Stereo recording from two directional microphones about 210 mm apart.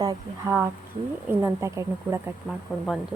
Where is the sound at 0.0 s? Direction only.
15° right (ahead or behind).